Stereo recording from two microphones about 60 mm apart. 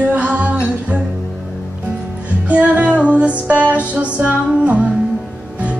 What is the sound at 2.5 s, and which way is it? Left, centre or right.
Music, right.